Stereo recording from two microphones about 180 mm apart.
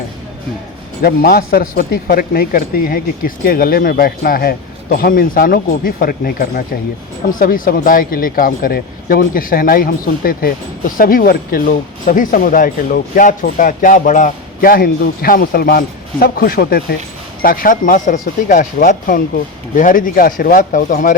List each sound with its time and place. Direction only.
1.0 s speech: 55° left (ahead or behind)